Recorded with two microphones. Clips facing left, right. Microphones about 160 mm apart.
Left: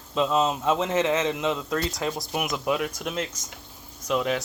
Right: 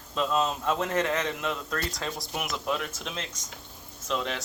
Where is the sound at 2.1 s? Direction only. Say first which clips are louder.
Left 5 dB; centre (ahead or behind).